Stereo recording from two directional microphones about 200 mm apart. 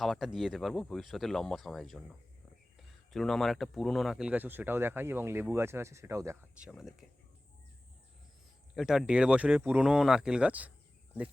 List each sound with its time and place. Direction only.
0.0 s speech: centre (ahead or behind)
6.7 s speech: centre (ahead or behind)
8.7 s speech: centre (ahead or behind)